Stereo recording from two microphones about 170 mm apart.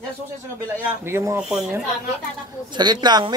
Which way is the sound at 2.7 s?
25° right (ahead or behind).